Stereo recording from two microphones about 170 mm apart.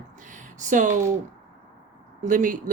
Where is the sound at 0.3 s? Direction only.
50° right (ahead or behind).